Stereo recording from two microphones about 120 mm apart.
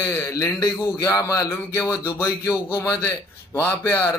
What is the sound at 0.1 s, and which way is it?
Speech, 25° left (ahead or behind).